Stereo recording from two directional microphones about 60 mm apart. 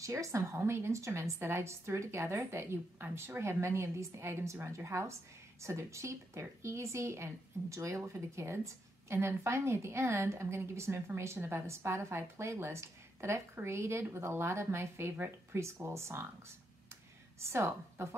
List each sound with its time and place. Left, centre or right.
0.0 s a woman's voice: right
15.6 s speech: right